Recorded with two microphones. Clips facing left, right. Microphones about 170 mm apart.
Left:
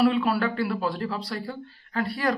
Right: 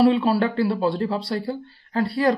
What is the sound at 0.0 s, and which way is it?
Speech, 30° right (ahead or behind).